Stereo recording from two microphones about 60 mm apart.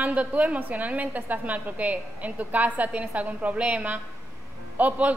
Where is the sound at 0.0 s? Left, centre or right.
Right.